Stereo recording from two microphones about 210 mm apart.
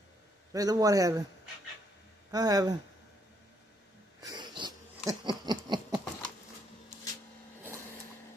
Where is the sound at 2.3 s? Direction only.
15° right (ahead or behind).